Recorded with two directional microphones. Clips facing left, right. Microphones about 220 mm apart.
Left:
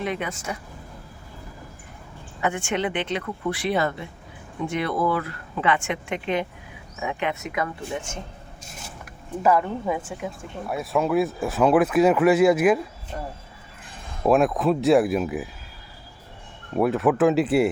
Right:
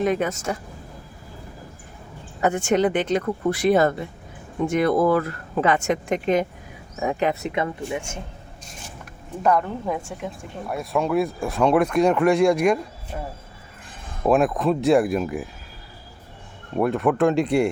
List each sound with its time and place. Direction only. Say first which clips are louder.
0.0 s speech: right 6 dB; 45° right (ahead or behind)
2.4 s speech: right 6 dB; 40° right (ahead or behind)
7.9 s speech: right 2 dB; 10° right (ahead or behind)
9.4 s speech: even; 5° left (ahead or behind)
14.3 s speech: even; centre (ahead or behind)
16.7 s speech: even; centre (ahead or behind)